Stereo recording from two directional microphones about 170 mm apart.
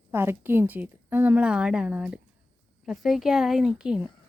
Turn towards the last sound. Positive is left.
turn(degrees=-5)  # may be behind; listen again after turning